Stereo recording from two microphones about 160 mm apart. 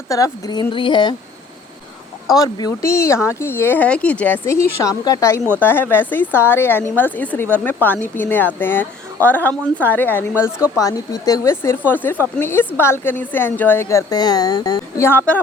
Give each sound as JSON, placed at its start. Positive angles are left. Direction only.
{"t": 0.1, "sound": "speech", "side_deg": 20}
{"t": 2.2, "sound": "a woman's voice", "side_deg": 25}